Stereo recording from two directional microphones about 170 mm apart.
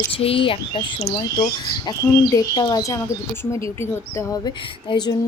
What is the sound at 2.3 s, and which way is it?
Speech, 25° left (ahead or behind).